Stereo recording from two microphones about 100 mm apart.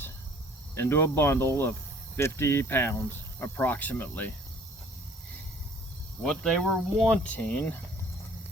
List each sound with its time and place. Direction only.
0.8 s speech: 20° left (ahead or behind)
6.2 s speech: 5° left (ahead or behind)